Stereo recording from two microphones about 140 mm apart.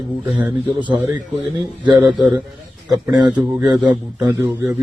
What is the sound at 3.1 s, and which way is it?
Speech, 30° right (ahead or behind).